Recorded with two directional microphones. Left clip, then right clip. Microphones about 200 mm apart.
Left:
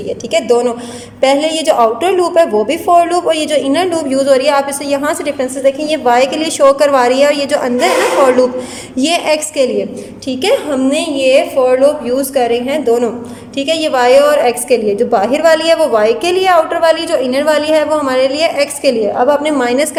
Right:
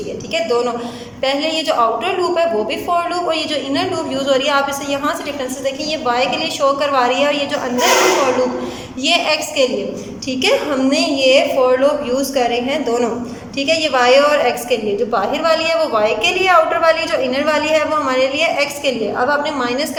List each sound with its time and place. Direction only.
0.3 s a woman's voice: 30° left (ahead or behind)
9.0 s a woman's voice: 30° left (ahead or behind)